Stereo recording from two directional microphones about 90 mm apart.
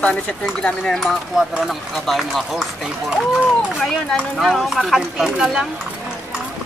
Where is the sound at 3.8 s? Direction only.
Centre (ahead or behind).